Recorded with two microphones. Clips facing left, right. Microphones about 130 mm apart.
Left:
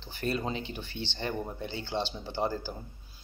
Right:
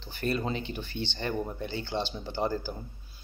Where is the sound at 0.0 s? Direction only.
30° left (ahead or behind).